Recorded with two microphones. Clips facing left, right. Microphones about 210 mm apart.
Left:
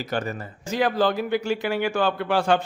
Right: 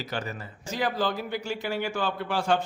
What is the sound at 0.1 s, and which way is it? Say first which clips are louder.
Speech: left 6 dB; 50° left (ahead or behind).